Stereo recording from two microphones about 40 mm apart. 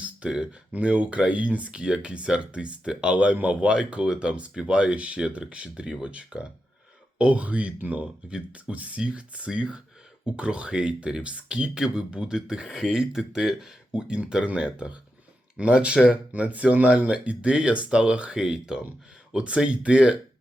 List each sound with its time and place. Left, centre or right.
0.2 s speech: right
1.7 s speech: right
8.0 s speech: right
8.7 s speech: right